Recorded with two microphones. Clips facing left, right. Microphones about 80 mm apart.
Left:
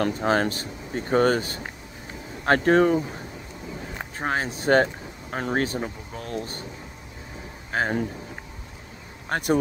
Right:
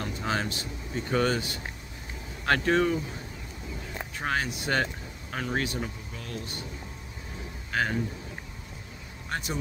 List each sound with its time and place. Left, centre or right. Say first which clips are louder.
0.2 s speech: left 8 dB; left
4.2 s speech: left 3 dB; left
7.7 s a man's voice: left 3 dB; left
9.3 s speech: left 10 dB; left